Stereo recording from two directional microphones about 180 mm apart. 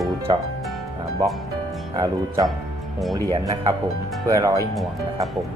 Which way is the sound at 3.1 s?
25° right (ahead or behind).